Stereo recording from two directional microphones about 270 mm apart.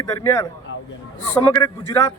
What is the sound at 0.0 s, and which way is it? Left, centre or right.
Speech, centre.